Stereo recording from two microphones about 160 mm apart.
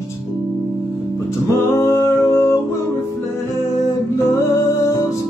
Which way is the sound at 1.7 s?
20° left (ahead or behind).